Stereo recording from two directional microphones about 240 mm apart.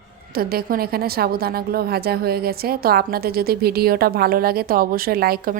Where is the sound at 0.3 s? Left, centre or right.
Right.